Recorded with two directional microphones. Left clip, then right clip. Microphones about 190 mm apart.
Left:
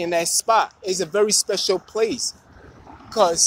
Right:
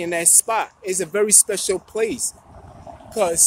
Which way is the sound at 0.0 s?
5° right (ahead or behind).